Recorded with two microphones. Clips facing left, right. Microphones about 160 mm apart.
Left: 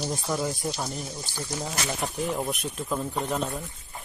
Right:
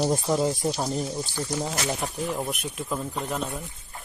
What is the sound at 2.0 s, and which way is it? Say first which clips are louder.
Speech: even; centre (ahead or behind).